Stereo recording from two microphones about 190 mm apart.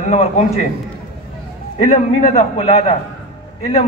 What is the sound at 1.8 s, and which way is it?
A man's voice, 35° left (ahead or behind).